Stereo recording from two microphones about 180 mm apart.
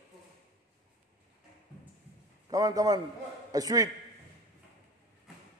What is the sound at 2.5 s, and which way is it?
A man's voice, 20° right (ahead or behind).